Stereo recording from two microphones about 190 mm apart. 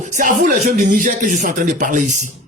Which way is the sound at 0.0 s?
40° right (ahead or behind).